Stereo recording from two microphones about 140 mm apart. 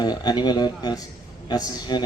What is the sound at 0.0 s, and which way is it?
Speech, 30° left (ahead or behind).